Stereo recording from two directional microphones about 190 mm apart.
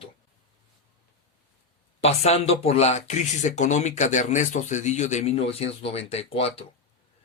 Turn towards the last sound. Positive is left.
turn(degrees=30)  # may be behind; listen again after turning